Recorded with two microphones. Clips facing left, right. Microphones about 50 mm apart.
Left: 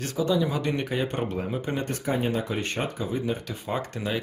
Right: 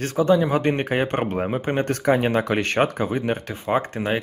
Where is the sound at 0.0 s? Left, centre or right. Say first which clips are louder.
Right 6 dB; right.